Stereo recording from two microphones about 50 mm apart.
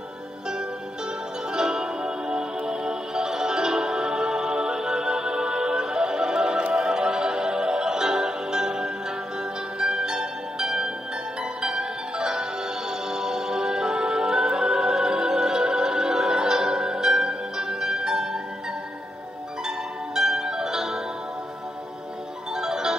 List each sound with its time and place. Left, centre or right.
1.5 s music: centre
20.2 s music: centre
22.5 s music: centre